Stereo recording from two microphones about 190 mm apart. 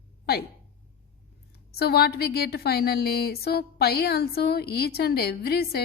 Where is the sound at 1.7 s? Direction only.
55° left (ahead or behind).